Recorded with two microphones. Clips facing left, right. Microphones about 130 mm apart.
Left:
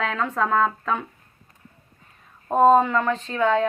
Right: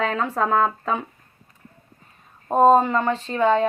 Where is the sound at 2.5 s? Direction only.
30° right (ahead or behind).